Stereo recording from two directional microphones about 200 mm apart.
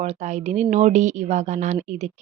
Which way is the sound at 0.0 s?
35° right (ahead or behind).